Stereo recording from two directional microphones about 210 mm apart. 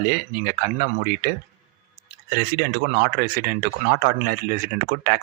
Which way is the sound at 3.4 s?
45° right (ahead or behind).